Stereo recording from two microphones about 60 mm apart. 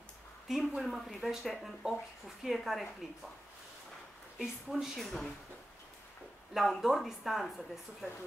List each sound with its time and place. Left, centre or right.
0.5 s speech: centre
4.4 s speech: centre
6.5 s speech: centre